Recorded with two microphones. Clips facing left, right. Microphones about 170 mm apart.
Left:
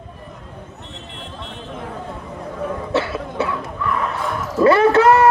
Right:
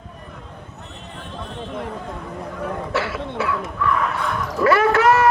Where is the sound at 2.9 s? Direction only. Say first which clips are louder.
Left 5 dB; 25° left (ahead or behind).